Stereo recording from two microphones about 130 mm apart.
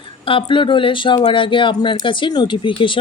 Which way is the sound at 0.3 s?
40° left (ahead or behind).